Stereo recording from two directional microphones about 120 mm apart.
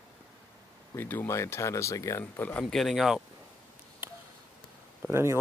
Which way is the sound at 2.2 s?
15° left (ahead or behind).